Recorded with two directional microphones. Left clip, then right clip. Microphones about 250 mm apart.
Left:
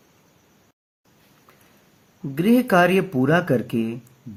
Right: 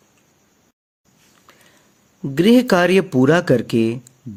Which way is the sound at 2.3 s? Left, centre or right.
Right.